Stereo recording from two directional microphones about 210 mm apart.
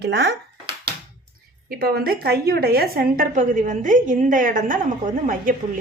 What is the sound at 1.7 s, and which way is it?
A woman's voice, 45° right (ahead or behind).